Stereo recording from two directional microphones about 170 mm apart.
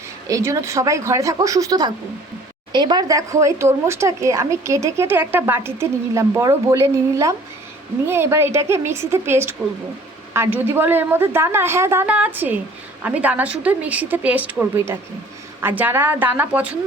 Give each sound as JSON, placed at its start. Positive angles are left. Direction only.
{"t": 0.3, "sound": "speech", "side_deg": -20}